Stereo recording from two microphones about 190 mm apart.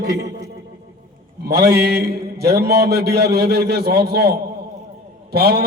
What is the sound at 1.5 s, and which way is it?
A man's voice, 55° right (ahead or behind).